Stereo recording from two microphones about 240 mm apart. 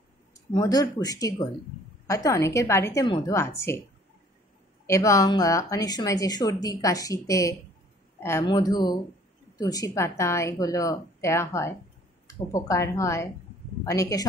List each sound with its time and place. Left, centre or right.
0.3 s speech: centre
4.8 s speech: centre